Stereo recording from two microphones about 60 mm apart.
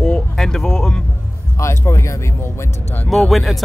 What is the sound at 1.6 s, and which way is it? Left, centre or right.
Speech, left.